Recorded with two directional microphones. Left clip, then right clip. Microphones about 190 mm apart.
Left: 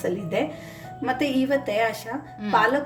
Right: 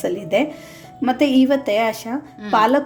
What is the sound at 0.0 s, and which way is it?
A woman's voice, 45° right (ahead or behind).